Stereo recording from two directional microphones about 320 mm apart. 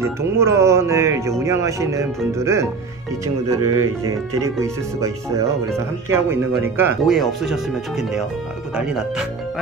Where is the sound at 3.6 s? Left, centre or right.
Right.